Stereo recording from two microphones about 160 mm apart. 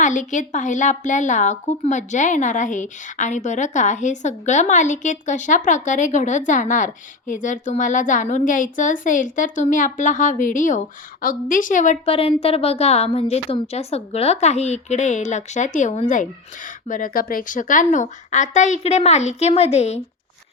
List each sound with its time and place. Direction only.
0.0 s a woman's voice: 50° left (ahead or behind)
12.0 s a woman's voice: 35° left (ahead or behind)